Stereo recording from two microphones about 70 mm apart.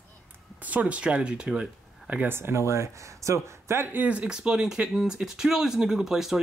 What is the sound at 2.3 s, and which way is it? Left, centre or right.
Speech, right.